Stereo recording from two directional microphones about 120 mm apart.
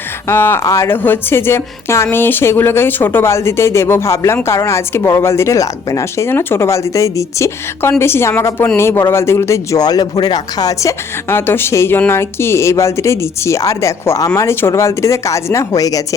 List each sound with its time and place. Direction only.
0.3 s speech: 20° left (ahead or behind)